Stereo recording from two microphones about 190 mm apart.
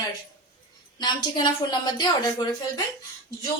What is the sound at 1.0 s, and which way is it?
A woman's voice, 25° left (ahead or behind).